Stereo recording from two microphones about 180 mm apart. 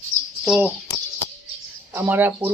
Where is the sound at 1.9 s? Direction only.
10° right (ahead or behind).